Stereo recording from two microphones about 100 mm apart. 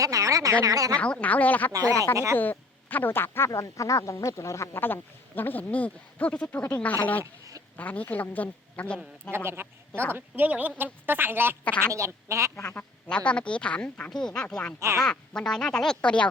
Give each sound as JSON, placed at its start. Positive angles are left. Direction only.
{"t": 0.0, "sound": "speech", "side_deg": -35}
{"t": 0.9, "sound": "a woman's voice", "side_deg": 10}
{"t": 1.7, "sound": "speech", "side_deg": -35}
{"t": 2.4, "sound": "a woman's voice", "side_deg": 20}
{"t": 9.3, "sound": "a woman's voice", "side_deg": -25}
{"t": 12.5, "sound": "speech", "side_deg": 25}
{"t": 13.1, "sound": "a woman's voice", "side_deg": 10}
{"t": 14.8, "sound": "speech", "side_deg": -30}
{"t": 15.0, "sound": "a woman's voice", "side_deg": 10}